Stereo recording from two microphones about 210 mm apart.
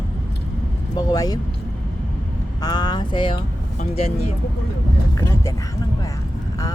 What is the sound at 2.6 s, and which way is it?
Speech, 20° left (ahead or behind).